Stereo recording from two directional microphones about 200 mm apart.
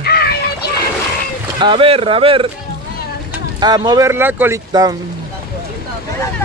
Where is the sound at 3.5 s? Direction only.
20° right (ahead or behind).